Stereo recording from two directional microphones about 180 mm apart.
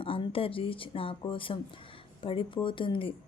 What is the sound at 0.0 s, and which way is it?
A woman's voice, 30° left (ahead or behind).